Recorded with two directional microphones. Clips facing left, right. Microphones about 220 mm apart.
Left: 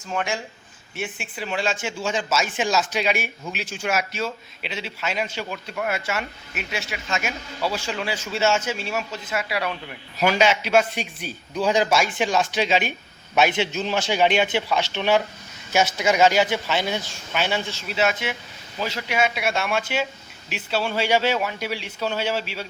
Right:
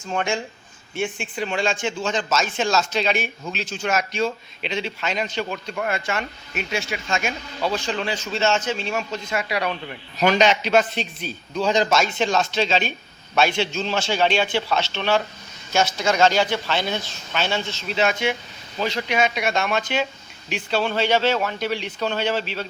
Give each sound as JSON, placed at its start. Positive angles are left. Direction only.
{"t": 0.1, "sound": "speech", "side_deg": 5}